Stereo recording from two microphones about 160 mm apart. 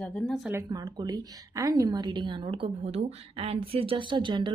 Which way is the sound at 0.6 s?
25° right (ahead or behind).